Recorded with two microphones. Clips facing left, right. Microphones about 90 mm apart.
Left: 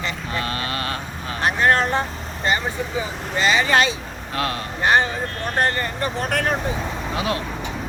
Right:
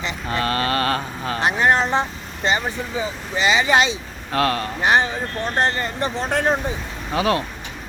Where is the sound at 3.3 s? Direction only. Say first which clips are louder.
Right 1 dB; 20° right (ahead or behind).